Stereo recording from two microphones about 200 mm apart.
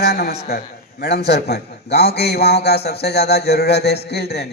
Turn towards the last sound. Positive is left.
turn(degrees=55)  # may be behind; listen again after turning